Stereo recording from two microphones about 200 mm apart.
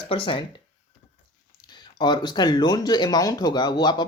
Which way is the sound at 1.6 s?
20° left (ahead or behind).